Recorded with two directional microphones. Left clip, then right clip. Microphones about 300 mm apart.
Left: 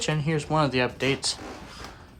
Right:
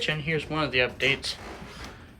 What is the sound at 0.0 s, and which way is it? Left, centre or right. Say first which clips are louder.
Speech: even; centre.